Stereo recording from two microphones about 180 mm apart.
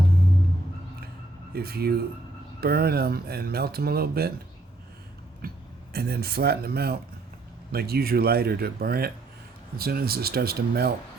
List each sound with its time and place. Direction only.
1.5 s speech: 60° right (ahead or behind)
5.9 s speech: 60° right (ahead or behind)